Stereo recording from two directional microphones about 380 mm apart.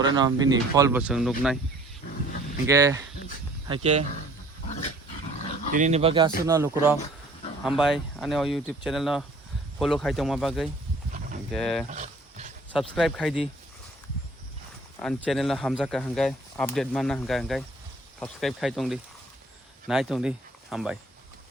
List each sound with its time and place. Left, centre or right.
0.0 s speech: centre
2.6 s speech: centre
5.7 s speech: centre
11.9 s a sound: centre
12.7 s speech: centre
14.9 s speech: centre